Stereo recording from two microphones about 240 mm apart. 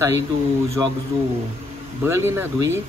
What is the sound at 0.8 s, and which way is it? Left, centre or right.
Speech, centre.